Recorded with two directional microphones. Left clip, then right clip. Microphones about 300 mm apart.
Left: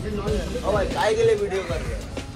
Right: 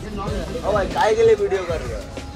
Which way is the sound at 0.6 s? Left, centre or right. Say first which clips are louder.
Right 4 dB; right.